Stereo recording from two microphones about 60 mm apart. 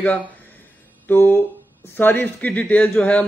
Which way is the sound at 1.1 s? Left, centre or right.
Left.